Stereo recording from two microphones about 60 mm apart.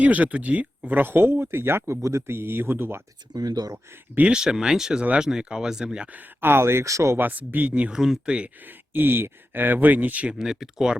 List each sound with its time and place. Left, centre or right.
0.0 s speech: right
0.9 s speech: right
2.0 s speech: right
3.3 s speech: right
4.3 s speech: centre
6.4 s speech: right
6.8 s speech: right
7.2 s speech: right
7.9 s speech: centre
8.9 s speech: right
10.3 s speech: centre